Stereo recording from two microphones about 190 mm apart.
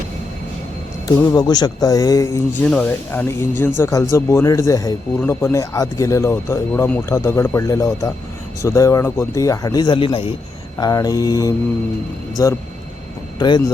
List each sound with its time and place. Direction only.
1.0 s speech: 15° left (ahead or behind)